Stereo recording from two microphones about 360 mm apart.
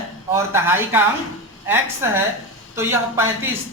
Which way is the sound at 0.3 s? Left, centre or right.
Centre.